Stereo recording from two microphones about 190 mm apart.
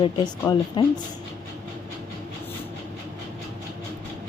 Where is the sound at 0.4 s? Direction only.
20° left (ahead or behind).